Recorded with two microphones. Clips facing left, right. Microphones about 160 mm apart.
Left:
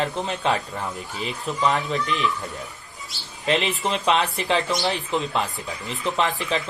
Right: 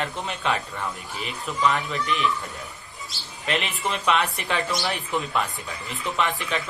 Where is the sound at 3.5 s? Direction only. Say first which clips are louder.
Left 4 dB; 30° left (ahead or behind).